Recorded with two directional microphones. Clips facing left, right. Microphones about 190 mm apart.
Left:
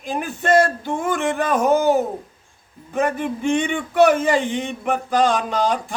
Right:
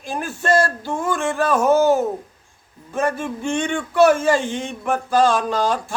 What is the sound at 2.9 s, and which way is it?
A man's voice, 15° left (ahead or behind).